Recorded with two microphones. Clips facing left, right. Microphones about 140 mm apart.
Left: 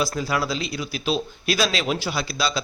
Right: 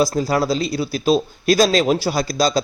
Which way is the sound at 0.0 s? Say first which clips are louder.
Right 6 dB; 40° right (ahead or behind).